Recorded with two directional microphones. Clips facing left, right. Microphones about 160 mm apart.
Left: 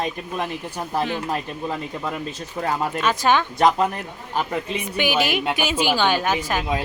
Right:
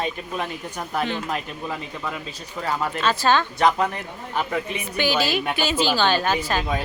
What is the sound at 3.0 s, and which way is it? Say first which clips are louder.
Speech: even; 15° left (ahead or behind).